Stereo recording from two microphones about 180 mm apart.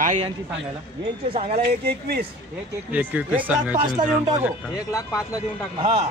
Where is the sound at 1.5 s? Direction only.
60° right (ahead or behind).